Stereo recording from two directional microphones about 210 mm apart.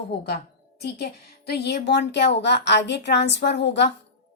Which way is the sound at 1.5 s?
50° left (ahead or behind).